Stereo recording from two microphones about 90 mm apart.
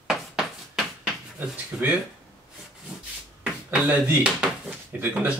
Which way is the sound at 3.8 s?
10° right (ahead or behind).